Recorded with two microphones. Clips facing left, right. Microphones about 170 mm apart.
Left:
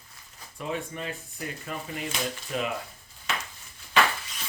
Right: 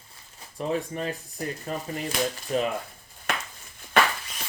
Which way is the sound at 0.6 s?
35° right (ahead or behind).